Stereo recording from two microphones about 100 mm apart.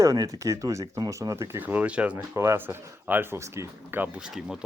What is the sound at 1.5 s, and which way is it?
Speech, 15° right (ahead or behind).